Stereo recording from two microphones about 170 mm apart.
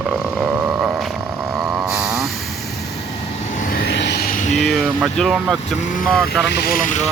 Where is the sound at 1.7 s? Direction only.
20° right (ahead or behind).